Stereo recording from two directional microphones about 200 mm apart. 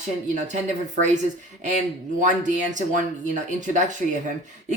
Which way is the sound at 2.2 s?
40° right (ahead or behind).